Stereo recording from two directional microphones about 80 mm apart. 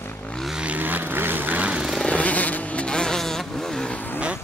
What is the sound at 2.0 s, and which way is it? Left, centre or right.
Vehicle, centre.